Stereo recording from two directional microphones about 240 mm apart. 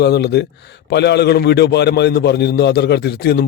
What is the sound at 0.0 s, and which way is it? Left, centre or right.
A man's voice, left.